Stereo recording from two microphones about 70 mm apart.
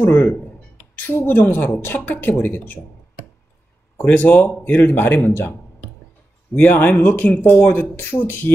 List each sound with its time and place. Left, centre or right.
0.0 s speech: left
4.0 s speech: left